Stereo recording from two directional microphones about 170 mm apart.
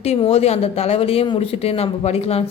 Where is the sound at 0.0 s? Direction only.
40° left (ahead or behind).